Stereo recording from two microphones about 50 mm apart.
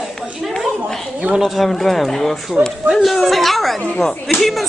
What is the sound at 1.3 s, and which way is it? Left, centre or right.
Speech, centre.